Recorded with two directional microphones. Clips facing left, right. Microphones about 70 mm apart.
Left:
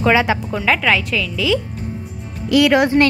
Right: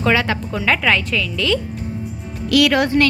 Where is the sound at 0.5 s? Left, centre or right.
Centre.